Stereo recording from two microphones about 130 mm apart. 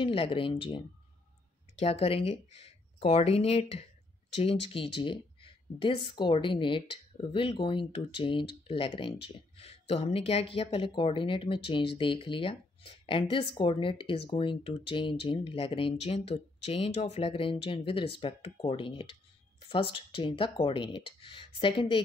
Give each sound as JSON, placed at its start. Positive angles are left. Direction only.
{"t": 0.0, "sound": "speech", "side_deg": 45}